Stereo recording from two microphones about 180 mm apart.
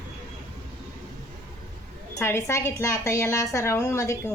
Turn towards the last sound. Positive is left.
turn(degrees=15)  # may be behind; listen again after turning